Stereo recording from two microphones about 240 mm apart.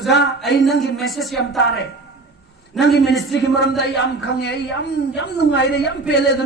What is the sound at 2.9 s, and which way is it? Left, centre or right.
Speech, centre.